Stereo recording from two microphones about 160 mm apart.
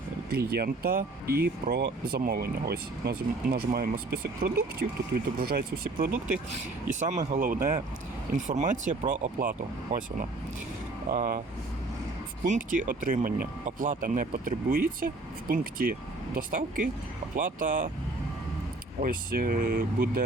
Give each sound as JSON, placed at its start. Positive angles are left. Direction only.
{"t": 0.3, "sound": "speech", "side_deg": -75}
{"t": 7.0, "sound": "speech", "side_deg": -50}
{"t": 8.4, "sound": "speech", "side_deg": -50}
{"t": 11.1, "sound": "speech", "side_deg": -50}
{"t": 12.5, "sound": "speech", "side_deg": -55}
{"t": 18.9, "sound": "speech", "side_deg": -65}